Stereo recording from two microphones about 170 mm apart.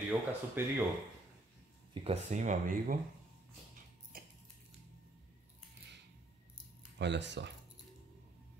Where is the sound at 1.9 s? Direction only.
35° right (ahead or behind).